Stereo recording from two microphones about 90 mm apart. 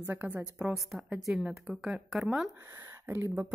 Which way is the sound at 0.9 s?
5° right (ahead or behind).